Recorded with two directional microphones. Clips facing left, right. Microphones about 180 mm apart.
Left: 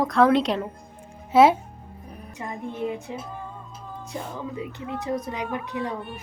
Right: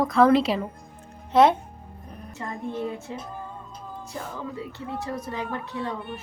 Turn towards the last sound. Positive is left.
turn(degrees=15)  # may be behind; listen again after turning